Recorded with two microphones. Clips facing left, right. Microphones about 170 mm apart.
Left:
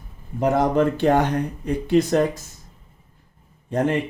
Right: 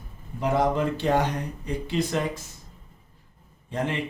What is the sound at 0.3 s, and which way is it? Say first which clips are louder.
Speech: left 5 dB; 50° left (ahead or behind).